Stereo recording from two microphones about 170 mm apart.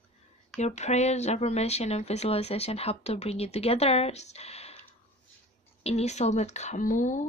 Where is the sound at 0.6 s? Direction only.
40° left (ahead or behind).